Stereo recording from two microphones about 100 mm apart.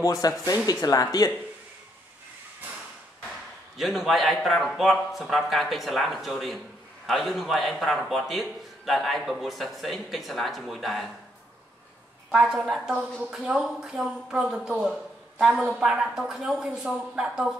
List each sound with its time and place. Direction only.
0.0 s speech: 40° left (ahead or behind)
3.7 s a man's voice: centre (ahead or behind)
12.3 s a man's voice: 5° right (ahead or behind)